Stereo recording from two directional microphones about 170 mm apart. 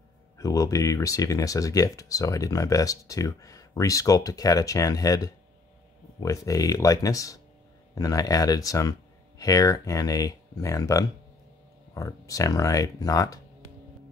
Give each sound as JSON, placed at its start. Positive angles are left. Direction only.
{"t": 0.4, "sound": "speech", "side_deg": 20}